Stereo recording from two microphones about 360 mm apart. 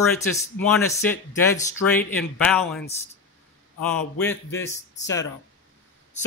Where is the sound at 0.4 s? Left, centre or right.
Centre.